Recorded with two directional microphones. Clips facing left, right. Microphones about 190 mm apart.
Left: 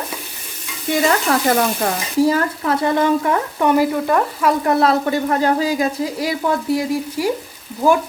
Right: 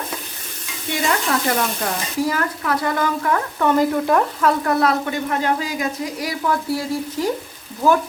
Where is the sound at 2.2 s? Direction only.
30° left (ahead or behind).